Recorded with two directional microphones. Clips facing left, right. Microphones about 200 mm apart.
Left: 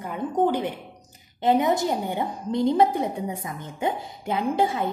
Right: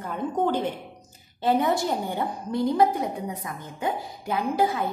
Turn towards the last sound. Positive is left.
turn(degrees=25)  # may be behind; listen again after turning